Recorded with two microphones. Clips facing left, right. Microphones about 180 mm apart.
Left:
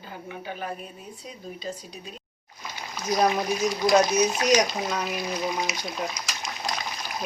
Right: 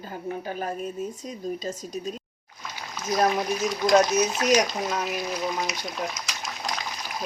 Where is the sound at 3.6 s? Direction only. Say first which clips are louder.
Right 1 dB; 5° left (ahead or behind).